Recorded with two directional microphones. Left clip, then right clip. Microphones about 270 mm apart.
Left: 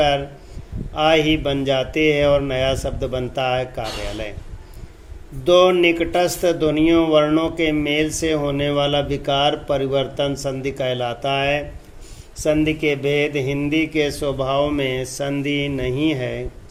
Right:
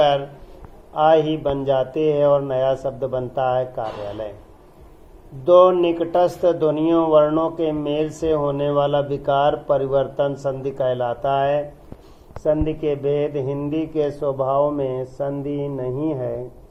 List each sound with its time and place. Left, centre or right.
0.0 s a man's voice: left
5.5 s a man's voice: left
12.5 s mantra: left
12.9 s a man's voice: left
14.2 s a man's voice: left
14.8 s mantra: left